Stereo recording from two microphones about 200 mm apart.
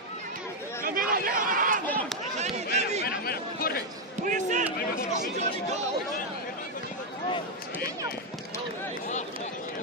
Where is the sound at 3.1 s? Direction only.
50° left (ahead or behind).